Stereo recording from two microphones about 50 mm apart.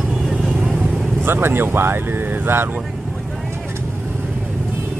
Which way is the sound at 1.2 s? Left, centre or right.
Right.